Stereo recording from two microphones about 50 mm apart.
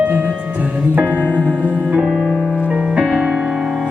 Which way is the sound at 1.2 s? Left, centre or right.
Left.